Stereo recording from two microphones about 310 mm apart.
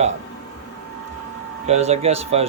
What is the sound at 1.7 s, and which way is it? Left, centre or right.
Speech, right.